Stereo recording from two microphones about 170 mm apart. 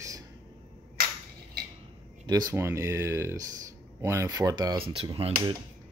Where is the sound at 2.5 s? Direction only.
15° right (ahead or behind); by 5.5 s 30° right (ahead or behind).